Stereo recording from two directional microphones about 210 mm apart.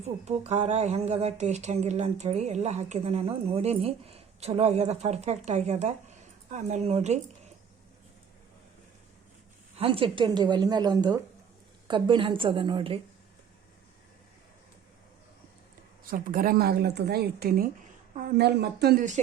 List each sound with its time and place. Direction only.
0.0 s speech: 30° right (ahead or behind)
9.7 s a woman's voice: 25° right (ahead or behind)
16.0 s speech: 40° right (ahead or behind)